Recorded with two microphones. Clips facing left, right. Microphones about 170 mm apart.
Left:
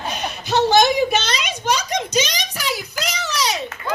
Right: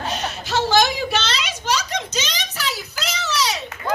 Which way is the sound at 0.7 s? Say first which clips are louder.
Left 3 dB; 20° left (ahead or behind).